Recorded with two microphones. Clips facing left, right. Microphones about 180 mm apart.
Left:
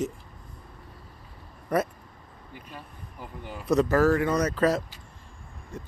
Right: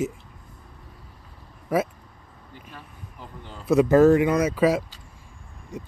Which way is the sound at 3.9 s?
20° right (ahead or behind).